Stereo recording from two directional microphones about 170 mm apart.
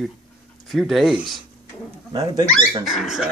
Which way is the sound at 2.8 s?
Centre (ahead or behind).